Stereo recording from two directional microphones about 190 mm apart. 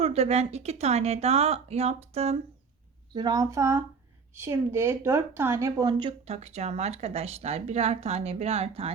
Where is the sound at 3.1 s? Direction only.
20° right (ahead or behind).